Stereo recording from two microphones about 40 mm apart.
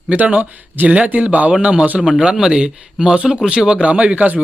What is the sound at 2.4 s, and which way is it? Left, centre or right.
Speech, centre.